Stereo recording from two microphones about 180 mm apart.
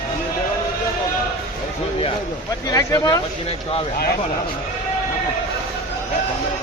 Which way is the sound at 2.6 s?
20° left (ahead or behind).